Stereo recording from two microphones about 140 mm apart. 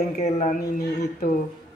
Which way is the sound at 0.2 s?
65° left (ahead or behind).